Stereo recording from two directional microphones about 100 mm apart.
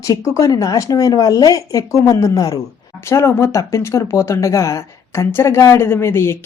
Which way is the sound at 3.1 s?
25° left (ahead or behind).